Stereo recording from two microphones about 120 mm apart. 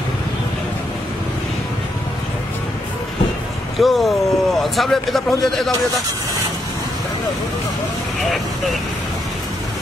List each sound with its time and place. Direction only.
3.8 s a man's voice: centre (ahead or behind)